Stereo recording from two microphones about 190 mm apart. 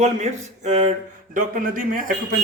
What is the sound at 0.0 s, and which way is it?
Speech, 40° right (ahead or behind).